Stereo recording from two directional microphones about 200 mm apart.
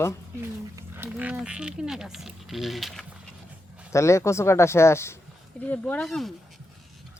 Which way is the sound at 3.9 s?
15° left (ahead or behind).